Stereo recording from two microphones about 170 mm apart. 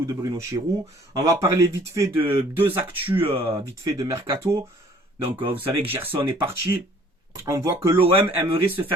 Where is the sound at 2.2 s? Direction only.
30° right (ahead or behind).